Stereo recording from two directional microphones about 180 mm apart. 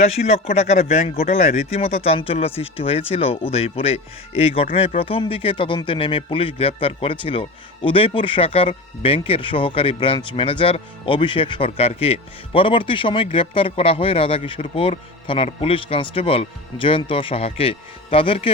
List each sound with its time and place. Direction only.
0.0 s speech: 35° left (ahead or behind)